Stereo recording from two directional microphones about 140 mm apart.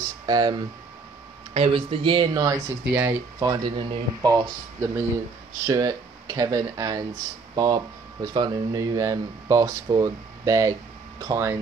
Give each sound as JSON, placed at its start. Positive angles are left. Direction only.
{"t": 0.3, "sound": "speech", "side_deg": -30}
{"t": 1.5, "sound": "speech", "side_deg": -40}
{"t": 2.9, "sound": "speech", "side_deg": -10}
{"t": 3.3, "sound": "speech", "side_deg": -30}